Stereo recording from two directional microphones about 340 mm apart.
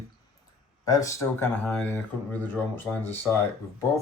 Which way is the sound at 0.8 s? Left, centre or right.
Centre.